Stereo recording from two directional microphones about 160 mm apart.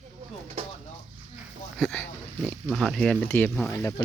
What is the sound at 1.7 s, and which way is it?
Speech, 5° left (ahead or behind).